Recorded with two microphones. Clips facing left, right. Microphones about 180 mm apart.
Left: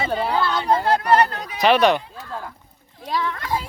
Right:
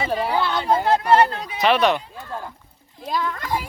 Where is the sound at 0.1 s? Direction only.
10° right (ahead or behind).